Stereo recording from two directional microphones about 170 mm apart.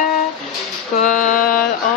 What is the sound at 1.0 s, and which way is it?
Mantra, 50° left (ahead or behind).